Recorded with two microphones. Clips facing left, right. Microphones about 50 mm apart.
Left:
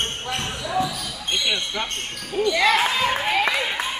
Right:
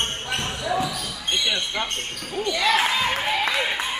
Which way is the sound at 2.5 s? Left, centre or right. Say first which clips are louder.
Left 3 dB; left.